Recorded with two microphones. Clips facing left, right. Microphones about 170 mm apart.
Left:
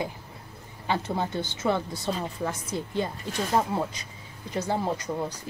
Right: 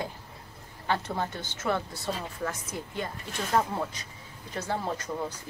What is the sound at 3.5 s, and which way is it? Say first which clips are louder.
Speech: left 1 dB; 15° left (ahead or behind).